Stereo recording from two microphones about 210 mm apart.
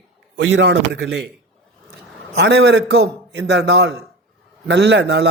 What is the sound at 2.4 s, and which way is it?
A man's voice, 55° right (ahead or behind).